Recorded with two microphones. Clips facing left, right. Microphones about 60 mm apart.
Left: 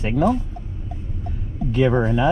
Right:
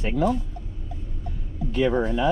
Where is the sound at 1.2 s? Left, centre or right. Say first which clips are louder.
Left 5 dB; left.